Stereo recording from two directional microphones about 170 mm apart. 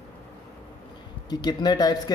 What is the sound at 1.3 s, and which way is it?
Speech, 25° left (ahead or behind).